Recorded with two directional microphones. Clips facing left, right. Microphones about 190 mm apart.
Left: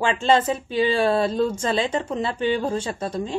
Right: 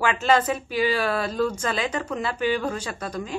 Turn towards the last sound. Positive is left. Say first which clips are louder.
# left 4 dB
turn(degrees=25)  # may be behind; listen again after turning